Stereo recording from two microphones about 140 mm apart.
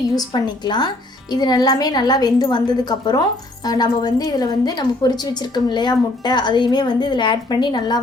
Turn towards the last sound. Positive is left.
turn(degrees=30)  # may be behind; listen again after turning